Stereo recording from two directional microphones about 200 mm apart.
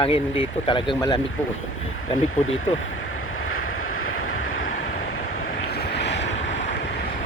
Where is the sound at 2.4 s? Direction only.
80° left.